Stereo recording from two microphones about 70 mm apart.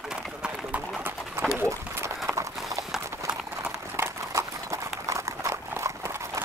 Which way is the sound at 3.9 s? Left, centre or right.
Right.